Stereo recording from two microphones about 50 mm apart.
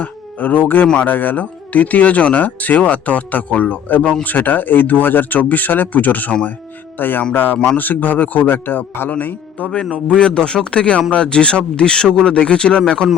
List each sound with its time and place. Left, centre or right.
0.0 s speech: left
9.9 s speech: left